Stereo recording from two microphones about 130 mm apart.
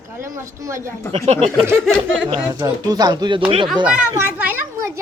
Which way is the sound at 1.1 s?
55° right (ahead or behind).